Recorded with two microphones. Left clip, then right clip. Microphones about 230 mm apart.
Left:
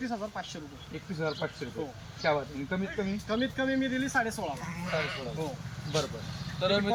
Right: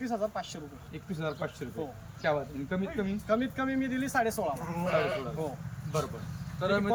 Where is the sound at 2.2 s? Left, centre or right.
Centre.